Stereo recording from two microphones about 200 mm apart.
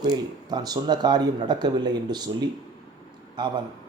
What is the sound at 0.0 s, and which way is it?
Speech, 20° right (ahead or behind).